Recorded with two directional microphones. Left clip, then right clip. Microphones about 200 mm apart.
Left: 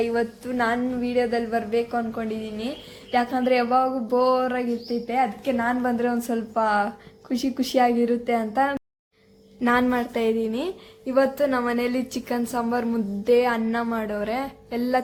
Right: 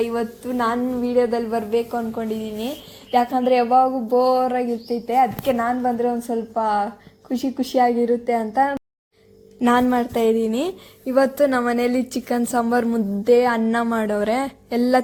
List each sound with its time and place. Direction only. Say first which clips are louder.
0.0 s a woman's voice: right 1 dB; 10° right (ahead or behind)
5.6 s a woman's voice: right 3 dB; 5° left (ahead or behind)
9.6 s speech: right 4 dB; 15° right (ahead or behind)
10.4 s speech: right 4 dB; 30° right (ahead or behind)